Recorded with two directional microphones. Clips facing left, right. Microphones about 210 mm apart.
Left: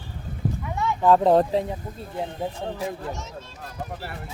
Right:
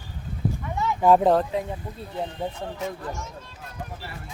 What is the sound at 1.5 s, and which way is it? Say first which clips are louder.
Speech: left 4 dB; 35° left (ahead or behind).